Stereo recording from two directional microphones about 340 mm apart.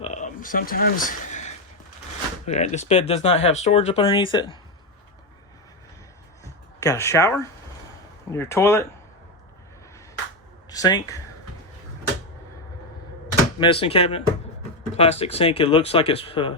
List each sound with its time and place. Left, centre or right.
0.0 s a sound: left
2.5 s speech: centre
6.4 s a sound: centre
8.3 s speech: centre
10.7 s speech: centre
13.6 s speech: centre